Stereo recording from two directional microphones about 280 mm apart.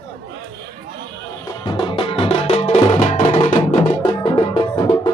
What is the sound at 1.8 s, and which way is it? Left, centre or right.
Music, centre.